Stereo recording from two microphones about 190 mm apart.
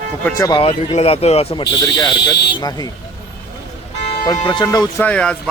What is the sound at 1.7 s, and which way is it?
A man's voice, 20° left (ahead or behind).